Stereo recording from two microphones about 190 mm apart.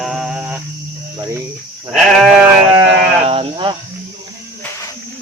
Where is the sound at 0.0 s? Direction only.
Centre (ahead or behind).